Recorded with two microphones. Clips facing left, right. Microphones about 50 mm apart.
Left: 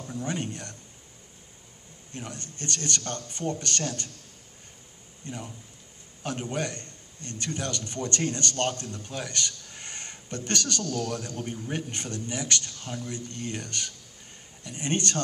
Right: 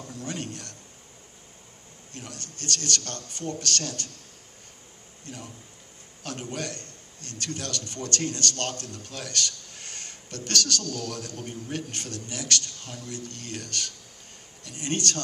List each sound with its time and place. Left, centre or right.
0.0 s speech: left
2.1 s a man's voice: left
5.2 s a man's voice: left